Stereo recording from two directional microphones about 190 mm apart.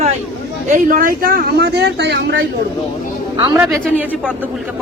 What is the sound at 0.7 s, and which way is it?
Speech, 45° right (ahead or behind).